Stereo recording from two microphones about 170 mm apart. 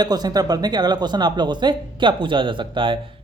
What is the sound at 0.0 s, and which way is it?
Speech, 25° right (ahead or behind).